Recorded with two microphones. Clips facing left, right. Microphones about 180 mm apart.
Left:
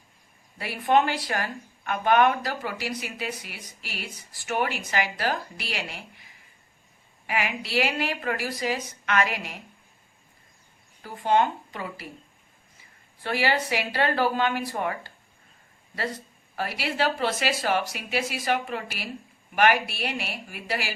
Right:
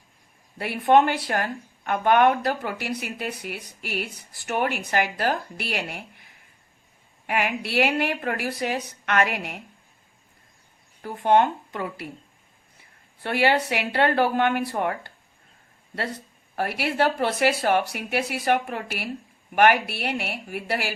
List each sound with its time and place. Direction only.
0.6 s a woman's voice: 60° right (ahead or behind)
11.0 s a woman's voice: 60° right (ahead or behind)
13.2 s a woman's voice: 60° right (ahead or behind)